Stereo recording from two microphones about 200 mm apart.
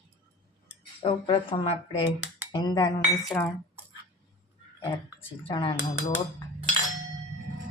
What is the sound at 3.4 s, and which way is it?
Speech, 10° left (ahead or behind).